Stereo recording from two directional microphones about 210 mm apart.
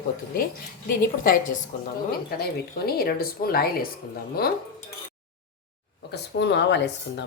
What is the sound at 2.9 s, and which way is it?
Speech, 45° left (ahead or behind).